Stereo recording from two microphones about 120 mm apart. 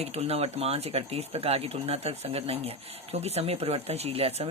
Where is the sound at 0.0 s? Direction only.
60° right (ahead or behind).